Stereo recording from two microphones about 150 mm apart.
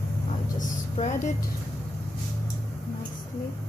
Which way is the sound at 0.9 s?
50° left (ahead or behind).